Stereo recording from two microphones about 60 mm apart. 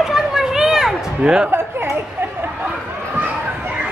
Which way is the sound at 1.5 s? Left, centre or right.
Right.